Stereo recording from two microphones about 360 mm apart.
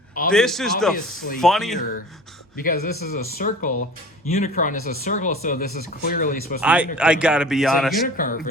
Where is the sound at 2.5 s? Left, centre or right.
Left.